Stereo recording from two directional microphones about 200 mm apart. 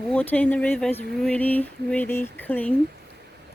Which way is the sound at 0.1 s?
10° left (ahead or behind).